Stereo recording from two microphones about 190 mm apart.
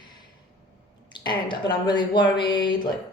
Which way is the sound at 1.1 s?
25° left (ahead or behind).